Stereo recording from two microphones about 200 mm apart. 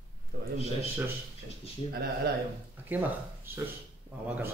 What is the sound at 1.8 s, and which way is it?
Speech, 30° left (ahead or behind).